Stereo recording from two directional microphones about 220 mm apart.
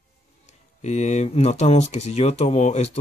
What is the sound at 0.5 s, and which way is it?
Speech, 30° left (ahead or behind).